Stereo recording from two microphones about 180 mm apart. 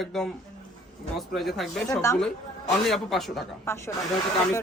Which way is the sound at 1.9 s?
15° left (ahead or behind).